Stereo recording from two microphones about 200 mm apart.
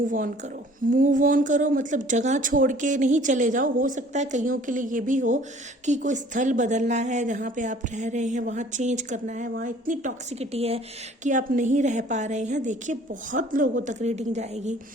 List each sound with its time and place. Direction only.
0.9 s a woman's voice: 40° right (ahead or behind)